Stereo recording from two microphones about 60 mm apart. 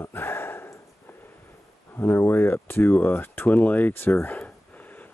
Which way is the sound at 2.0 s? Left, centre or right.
Left.